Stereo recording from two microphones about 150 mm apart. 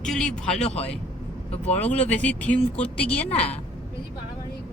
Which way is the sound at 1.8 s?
10° left (ahead or behind).